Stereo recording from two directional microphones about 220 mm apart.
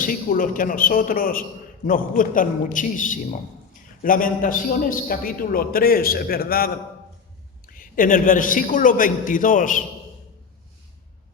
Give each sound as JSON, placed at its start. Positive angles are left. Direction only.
{"t": 0.0, "sound": "a man's voice", "side_deg": 40}
{"t": 7.7, "sound": "a man's voice", "side_deg": 40}